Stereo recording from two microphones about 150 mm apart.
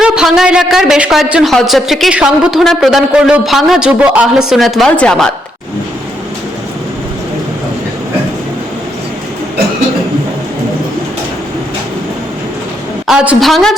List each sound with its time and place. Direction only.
0.0 s a woman's voice: 5° right (ahead or behind)
13.1 s a woman's voice: 5° right (ahead or behind)